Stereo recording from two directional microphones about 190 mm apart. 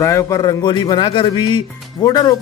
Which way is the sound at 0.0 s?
15° left (ahead or behind).